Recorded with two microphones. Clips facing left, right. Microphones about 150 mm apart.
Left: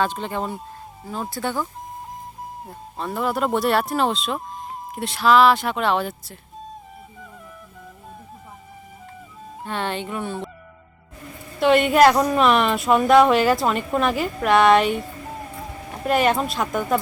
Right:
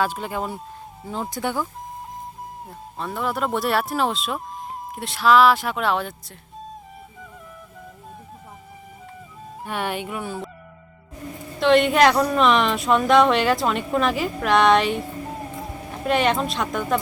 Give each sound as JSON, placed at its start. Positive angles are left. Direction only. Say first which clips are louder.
{"t": 0.0, "sound": "speech", "louder": "left 1 dB", "side_deg": -5}
{"t": 2.6, "sound": "speech", "louder": "left 2 dB", "side_deg": 0}
{"t": 9.6, "sound": "speech", "louder": "even", "side_deg": -10}
{"t": 11.6, "sound": "speech", "louder": "left 1 dB", "side_deg": 5}